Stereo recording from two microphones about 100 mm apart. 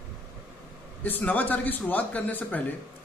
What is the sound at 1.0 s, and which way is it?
Speech, 20° left (ahead or behind).